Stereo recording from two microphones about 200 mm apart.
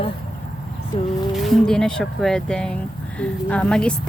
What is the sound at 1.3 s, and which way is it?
Speech, centre (ahead or behind).